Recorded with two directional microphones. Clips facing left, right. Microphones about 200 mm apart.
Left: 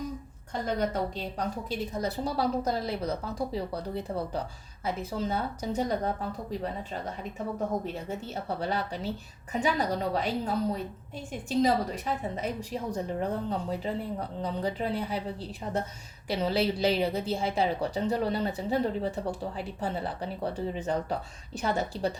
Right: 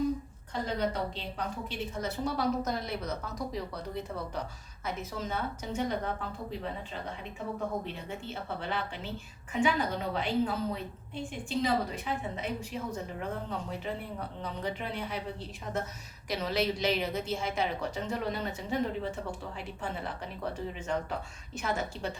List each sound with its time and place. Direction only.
0.8 s a woman's voice: 45° left (ahead or behind)
7.9 s a woman's voice: 40° left (ahead or behind)
16.3 s a woman's voice: 30° left (ahead or behind)